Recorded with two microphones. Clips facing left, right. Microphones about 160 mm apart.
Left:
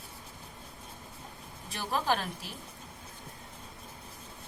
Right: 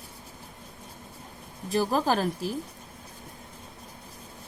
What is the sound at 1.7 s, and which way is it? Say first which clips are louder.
Speech: right 6 dB; 35° right (ahead or behind).